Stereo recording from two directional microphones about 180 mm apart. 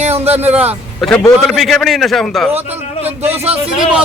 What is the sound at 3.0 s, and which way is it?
Speech, 35° right (ahead or behind).